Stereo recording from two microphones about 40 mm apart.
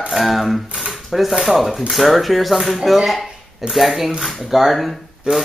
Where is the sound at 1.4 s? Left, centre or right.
Centre.